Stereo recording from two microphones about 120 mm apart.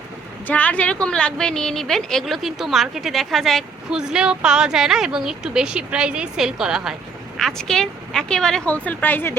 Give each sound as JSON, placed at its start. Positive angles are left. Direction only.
{"t": 0.4, "sound": "a woman's voice", "side_deg": 15}